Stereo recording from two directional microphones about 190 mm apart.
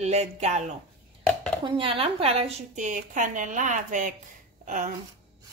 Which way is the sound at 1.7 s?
30° right (ahead or behind).